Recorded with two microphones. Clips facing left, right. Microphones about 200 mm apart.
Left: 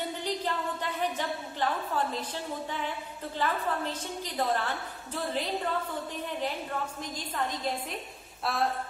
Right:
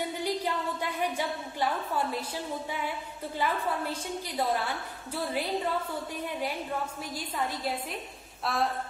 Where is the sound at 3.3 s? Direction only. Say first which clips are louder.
Even; 10° right (ahead or behind).